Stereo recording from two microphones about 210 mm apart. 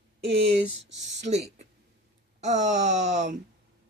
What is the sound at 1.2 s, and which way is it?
Speech, 30° right (ahead or behind).